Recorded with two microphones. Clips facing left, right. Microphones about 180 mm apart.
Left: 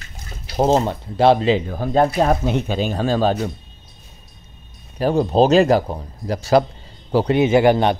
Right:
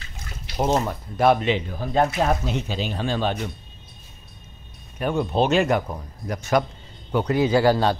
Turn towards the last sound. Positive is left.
turn(degrees=20)  # may be behind; listen again after turning